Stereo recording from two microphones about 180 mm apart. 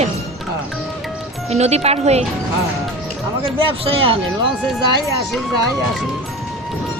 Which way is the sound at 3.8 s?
30° right (ahead or behind).